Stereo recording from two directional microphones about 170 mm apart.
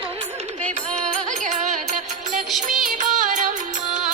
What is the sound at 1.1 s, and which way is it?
Music, 45° right (ahead or behind).